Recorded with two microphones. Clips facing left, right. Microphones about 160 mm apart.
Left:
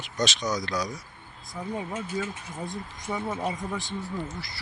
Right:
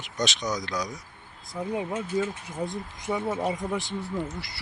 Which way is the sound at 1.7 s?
5° right (ahead or behind).